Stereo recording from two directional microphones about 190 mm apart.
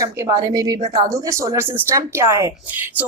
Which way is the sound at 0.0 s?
20° right (ahead or behind).